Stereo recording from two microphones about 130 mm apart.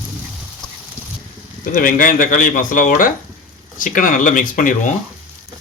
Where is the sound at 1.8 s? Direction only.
90° left.